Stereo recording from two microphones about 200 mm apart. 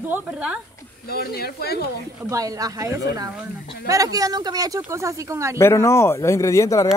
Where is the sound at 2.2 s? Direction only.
15° right (ahead or behind).